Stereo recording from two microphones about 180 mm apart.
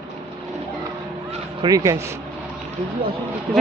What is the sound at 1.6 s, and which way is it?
Speech, 20° right (ahead or behind).